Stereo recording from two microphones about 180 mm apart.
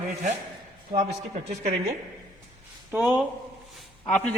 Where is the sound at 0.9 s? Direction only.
40° right (ahead or behind).